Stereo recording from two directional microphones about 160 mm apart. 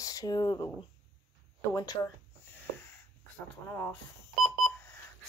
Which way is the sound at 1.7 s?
20° left (ahead or behind).